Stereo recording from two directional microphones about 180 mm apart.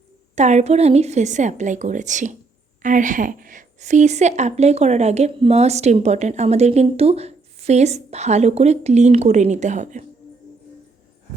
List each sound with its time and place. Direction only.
0.3 s a woman's voice: 40° right (ahead or behind)